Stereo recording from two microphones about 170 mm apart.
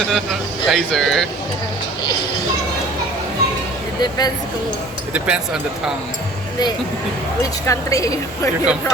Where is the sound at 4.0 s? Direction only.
25° left (ahead or behind).